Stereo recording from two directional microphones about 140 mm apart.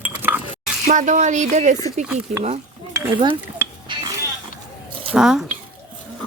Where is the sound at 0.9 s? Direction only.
60° right (ahead or behind).